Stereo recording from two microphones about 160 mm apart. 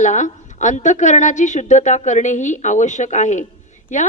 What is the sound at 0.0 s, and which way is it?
A woman's voice, 50° left (ahead or behind).